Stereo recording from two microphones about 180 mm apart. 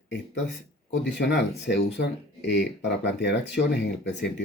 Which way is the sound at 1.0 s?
70° left (ahead or behind).